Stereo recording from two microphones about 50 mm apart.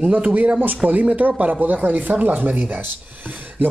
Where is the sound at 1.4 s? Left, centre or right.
Right.